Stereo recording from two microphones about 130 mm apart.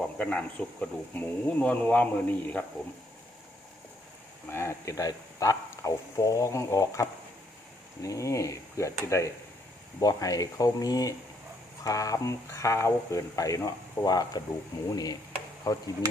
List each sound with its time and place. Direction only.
0.0 s speech: 10° left (ahead or behind)
4.4 s speech: 20° left (ahead or behind)